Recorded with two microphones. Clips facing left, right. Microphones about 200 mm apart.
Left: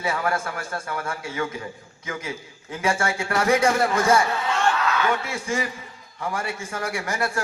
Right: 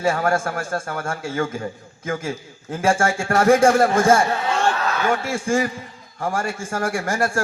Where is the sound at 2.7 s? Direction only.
50° right (ahead or behind).